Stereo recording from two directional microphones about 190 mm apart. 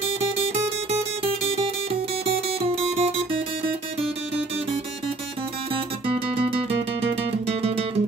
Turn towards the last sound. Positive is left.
turn(degrees=-30)  # may be behind; listen again after turning